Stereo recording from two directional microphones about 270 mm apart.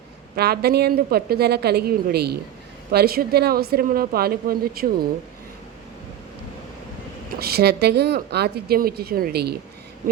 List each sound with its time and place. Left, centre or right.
0.3 s speech: right
7.3 s speech: right